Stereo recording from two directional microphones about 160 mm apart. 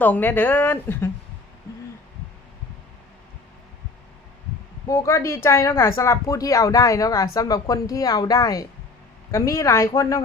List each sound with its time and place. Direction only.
0.0 s a woman's voice: 10° left (ahead or behind)
4.9 s speech: 20° left (ahead or behind)